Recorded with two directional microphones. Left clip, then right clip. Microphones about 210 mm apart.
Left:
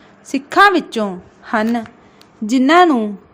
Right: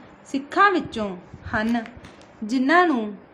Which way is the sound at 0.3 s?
25° left (ahead or behind).